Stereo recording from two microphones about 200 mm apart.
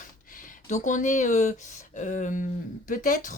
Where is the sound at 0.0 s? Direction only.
40° left (ahead or behind).